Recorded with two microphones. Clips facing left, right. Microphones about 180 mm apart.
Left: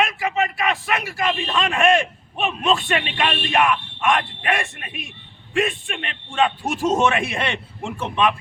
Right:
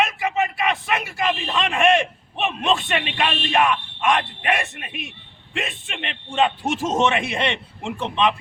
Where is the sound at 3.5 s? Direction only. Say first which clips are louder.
Even; 20° right (ahead or behind).